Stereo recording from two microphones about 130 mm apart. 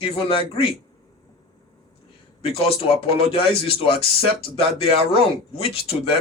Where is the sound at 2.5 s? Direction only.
45° left (ahead or behind).